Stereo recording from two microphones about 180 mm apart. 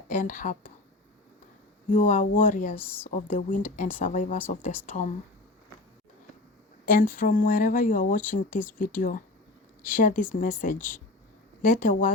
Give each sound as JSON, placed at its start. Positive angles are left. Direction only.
{"t": 0.1, "sound": "speech", "side_deg": 45}
{"t": 1.9, "sound": "speech", "side_deg": 45}
{"t": 2.7, "sound": "a woman's voice", "side_deg": 10}
{"t": 3.1, "sound": "speech", "side_deg": 45}
{"t": 6.8, "sound": "speech", "side_deg": 50}
{"t": 8.4, "sound": "a woman's voice", "side_deg": 10}
{"t": 8.8, "sound": "speech", "side_deg": 50}